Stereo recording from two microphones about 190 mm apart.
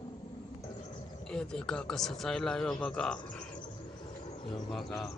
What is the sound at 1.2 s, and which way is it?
Speech, 5° left (ahead or behind).